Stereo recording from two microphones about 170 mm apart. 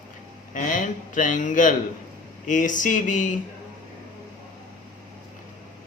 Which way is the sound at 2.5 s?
50° left (ahead or behind).